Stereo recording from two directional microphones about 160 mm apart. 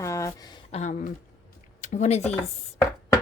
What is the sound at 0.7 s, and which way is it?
Speech, 45° left (ahead or behind).